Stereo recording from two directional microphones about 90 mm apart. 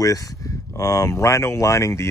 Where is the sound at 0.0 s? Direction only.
40° left (ahead or behind).